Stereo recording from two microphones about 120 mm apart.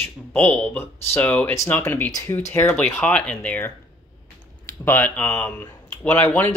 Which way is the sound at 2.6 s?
10° left (ahead or behind).